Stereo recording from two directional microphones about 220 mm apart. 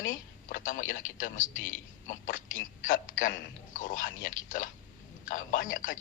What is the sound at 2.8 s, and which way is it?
A man's voice, 35° left (ahead or behind).